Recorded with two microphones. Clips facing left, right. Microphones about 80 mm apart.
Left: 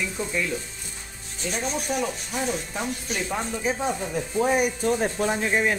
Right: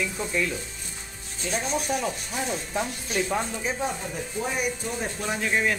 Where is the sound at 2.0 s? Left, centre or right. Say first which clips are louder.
Left 2 dB; centre.